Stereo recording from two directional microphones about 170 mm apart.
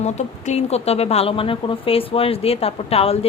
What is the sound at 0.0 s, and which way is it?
A woman's voice, 40° left (ahead or behind).